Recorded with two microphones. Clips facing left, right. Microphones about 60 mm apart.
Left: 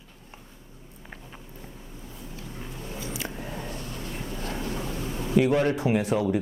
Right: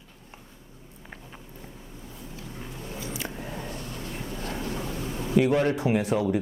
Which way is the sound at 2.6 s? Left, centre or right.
Centre.